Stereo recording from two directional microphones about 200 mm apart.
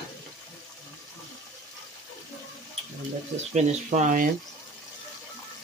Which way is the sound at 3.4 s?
35° right (ahead or behind).